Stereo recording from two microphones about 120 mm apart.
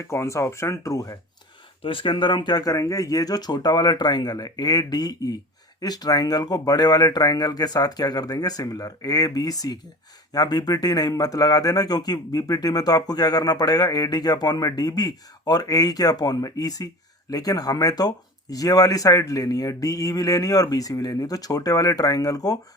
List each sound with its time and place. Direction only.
0.0 s speech: 25° left (ahead or behind)
1.8 s a man's voice: 45° left (ahead or behind); by 22.5 s 30° left (ahead or behind)